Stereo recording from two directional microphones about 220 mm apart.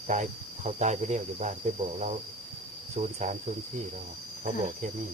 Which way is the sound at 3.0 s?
35° right (ahead or behind).